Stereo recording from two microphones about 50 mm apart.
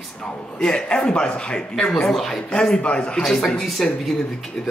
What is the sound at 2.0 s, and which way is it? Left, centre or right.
Speech, centre.